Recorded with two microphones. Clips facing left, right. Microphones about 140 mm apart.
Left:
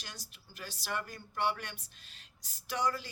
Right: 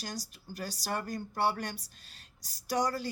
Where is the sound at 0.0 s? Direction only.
40° right (ahead or behind).